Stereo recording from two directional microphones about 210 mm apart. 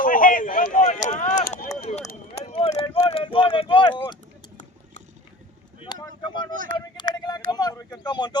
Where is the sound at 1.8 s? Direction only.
30° left (ahead or behind).